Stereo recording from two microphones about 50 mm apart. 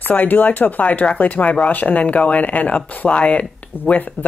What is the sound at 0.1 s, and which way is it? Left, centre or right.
A woman's voice, left.